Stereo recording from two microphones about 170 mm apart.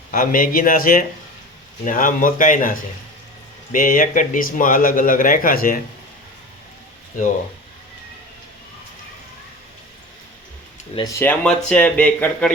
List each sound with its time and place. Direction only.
0.1 s speech: 55° left (ahead or behind)
11.2 s speech: 10° left (ahead or behind)